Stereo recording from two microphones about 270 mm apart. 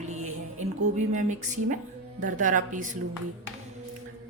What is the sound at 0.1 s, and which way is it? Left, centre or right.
Music, right.